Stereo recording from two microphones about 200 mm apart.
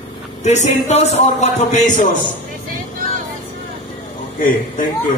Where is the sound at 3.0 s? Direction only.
45° right (ahead or behind).